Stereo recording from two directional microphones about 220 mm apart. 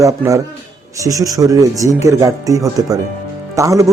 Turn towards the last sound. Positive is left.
turn(degrees=-15)  # may be behind; listen again after turning